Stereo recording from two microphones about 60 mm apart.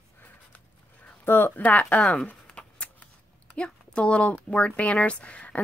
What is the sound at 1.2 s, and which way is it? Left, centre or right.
Speech, left.